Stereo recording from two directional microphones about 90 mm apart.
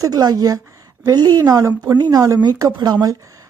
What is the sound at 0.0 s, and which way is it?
Speech, 45° right (ahead or behind).